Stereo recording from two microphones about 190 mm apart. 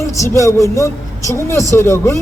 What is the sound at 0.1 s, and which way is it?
Speech, 15° left (ahead or behind).